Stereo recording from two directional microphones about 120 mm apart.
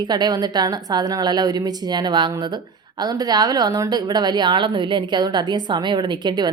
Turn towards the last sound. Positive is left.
turn(degrees=-35)  # may be behind; listen again after turning